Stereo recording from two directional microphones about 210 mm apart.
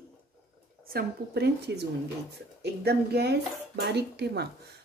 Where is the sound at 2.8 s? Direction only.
50° right (ahead or behind).